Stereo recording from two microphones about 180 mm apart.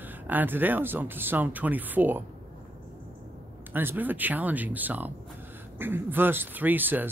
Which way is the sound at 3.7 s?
10° right (ahead or behind).